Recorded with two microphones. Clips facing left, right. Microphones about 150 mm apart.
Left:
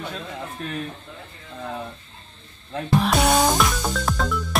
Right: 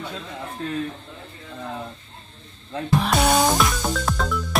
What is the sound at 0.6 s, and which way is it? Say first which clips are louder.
Speech: right 4 dB; 25° right (ahead or behind).